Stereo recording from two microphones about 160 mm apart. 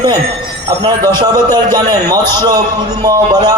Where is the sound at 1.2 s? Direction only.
25° right (ahead or behind).